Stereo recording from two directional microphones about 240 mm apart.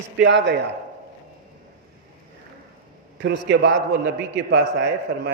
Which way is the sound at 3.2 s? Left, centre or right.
Right.